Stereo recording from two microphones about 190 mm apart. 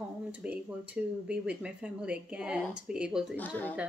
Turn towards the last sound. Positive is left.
turn(degrees=10)  # may be behind; listen again after turning